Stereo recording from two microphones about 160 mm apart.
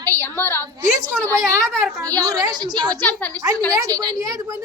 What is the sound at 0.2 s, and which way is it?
Speech, 15° left (ahead or behind).